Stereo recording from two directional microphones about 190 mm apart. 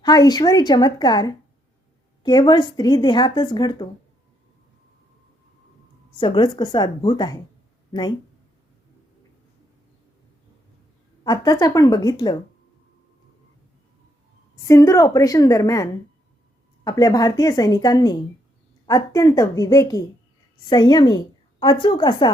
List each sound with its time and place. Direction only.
0.0 s speech: 20° left (ahead or behind)
6.1 s speech: 25° left (ahead or behind)
11.2 s speech: 20° left (ahead or behind)
14.5 s a woman's voice: 15° left (ahead or behind)